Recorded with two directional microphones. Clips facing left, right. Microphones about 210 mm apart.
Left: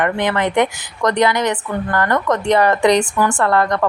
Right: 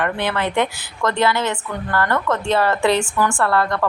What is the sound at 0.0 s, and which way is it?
A woman's voice, 15° left (ahead or behind).